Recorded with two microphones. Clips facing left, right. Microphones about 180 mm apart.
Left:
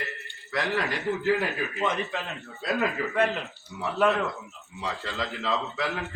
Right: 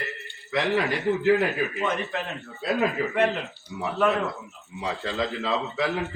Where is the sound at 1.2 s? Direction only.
20° right (ahead or behind).